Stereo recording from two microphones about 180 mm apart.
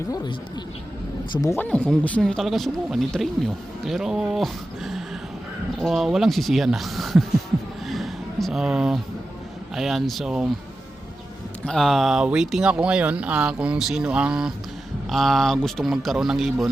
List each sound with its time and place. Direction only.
0.1 s speech: 25° left (ahead or behind)
1.5 s speech: 10° left (ahead or behind)
7.9 s a sound: centre (ahead or behind)
9.7 s speech: centre (ahead or behind)
11.6 s speech: centre (ahead or behind)